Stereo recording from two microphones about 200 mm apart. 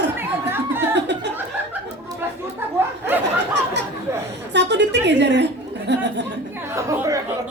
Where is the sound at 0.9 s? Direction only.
60° right (ahead or behind).